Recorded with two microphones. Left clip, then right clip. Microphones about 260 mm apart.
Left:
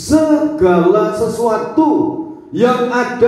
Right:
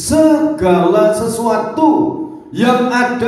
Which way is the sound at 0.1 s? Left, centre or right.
Right.